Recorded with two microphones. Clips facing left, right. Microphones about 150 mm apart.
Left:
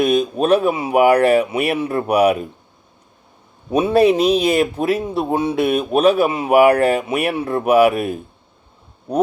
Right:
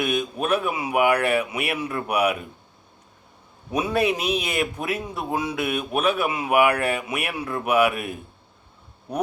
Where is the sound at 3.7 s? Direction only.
30° left (ahead or behind).